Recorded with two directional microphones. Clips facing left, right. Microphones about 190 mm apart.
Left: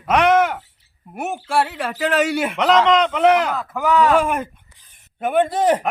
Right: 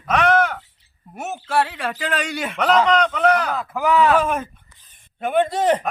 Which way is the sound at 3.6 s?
10° right (ahead or behind).